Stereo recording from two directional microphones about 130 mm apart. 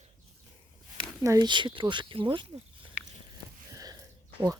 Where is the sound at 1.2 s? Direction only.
30° right (ahead or behind).